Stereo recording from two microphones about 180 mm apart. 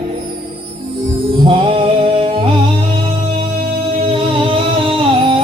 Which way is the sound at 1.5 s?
30° right (ahead or behind).